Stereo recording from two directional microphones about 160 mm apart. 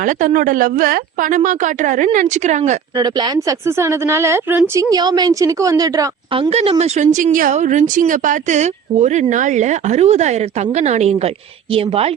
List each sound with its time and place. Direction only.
0.0 s a woman's voice: 55° right (ahead or behind)
3.0 s speech: 25° right (ahead or behind)
6.3 s speech: 35° right (ahead or behind)